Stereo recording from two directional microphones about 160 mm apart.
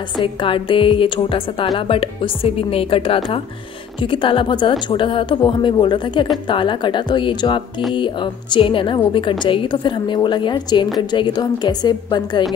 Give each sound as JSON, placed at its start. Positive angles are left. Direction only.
{"t": 0.2, "sound": "a woman's voice", "side_deg": 30}